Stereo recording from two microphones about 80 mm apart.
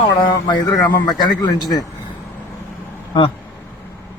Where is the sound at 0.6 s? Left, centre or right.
Left.